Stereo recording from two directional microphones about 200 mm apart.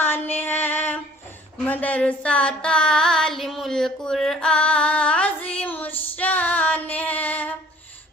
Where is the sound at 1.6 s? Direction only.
10° left (ahead or behind).